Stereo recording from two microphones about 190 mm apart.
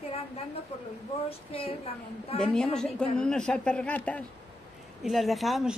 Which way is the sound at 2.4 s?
5° left (ahead or behind).